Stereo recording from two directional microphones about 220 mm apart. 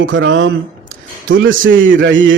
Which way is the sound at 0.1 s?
60° right (ahead or behind).